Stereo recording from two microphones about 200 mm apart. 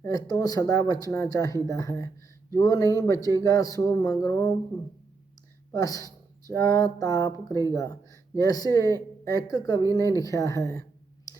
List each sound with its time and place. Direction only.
0.0 s speech: 20° left (ahead or behind)
5.7 s speech: 15° left (ahead or behind)